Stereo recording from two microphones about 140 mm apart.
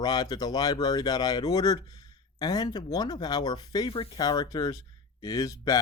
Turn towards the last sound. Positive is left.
turn(degrees=25)  # may be behind; listen again after turning